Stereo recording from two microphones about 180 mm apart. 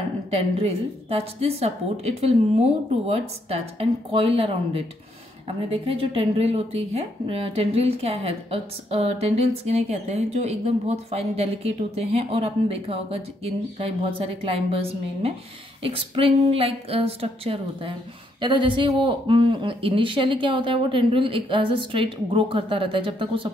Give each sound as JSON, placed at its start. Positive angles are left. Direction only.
{"t": 0.3, "sound": "speech", "side_deg": -35}